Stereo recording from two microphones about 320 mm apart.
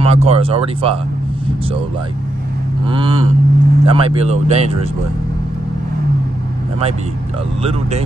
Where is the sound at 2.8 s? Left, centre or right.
Centre.